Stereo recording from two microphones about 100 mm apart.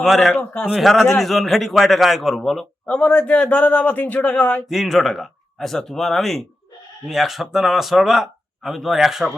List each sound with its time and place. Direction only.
0.0 s a man's voice: centre (ahead or behind)
0.3 s a man's voice: 15° left (ahead or behind)
0.7 s a man's voice: centre (ahead or behind)
2.8 s a man's voice: 15° left (ahead or behind)
4.6 s a man's voice: centre (ahead or behind)